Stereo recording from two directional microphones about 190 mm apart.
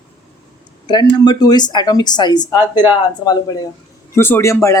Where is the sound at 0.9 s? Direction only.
20° left (ahead or behind).